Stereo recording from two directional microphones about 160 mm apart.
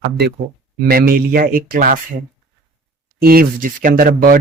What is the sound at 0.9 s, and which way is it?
Speech, 65° right (ahead or behind).